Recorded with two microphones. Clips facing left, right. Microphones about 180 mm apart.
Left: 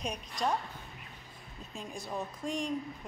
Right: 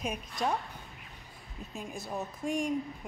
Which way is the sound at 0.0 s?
5° right (ahead or behind).